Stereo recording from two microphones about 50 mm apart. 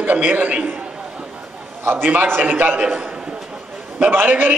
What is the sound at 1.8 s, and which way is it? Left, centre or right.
A man's voice, right.